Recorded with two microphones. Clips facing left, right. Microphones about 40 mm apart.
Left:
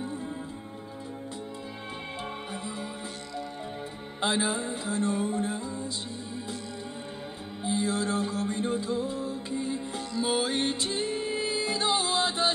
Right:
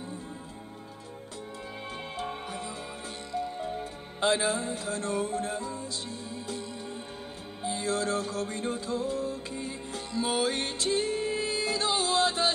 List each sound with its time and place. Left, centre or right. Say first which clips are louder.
4.2 s music: right 1 dB; centre
7.6 s music: left 1 dB; centre